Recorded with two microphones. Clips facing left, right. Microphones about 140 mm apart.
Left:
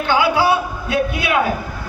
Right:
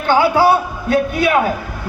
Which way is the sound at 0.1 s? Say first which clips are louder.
Right 4 dB; 45° right (ahead or behind).